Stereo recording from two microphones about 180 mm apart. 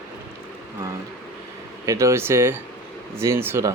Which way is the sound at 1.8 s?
15° right (ahead or behind).